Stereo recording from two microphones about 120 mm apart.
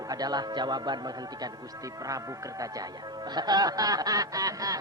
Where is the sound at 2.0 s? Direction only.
30° right (ahead or behind).